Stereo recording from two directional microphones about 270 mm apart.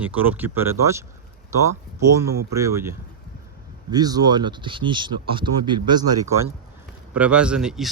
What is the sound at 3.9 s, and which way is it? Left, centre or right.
Speech, centre.